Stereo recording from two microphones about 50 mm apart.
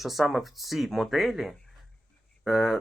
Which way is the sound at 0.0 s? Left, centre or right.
Centre.